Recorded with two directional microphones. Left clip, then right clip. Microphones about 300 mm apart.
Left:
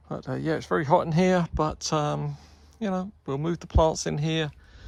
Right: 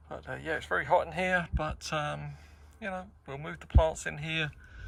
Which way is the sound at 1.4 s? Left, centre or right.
Centre.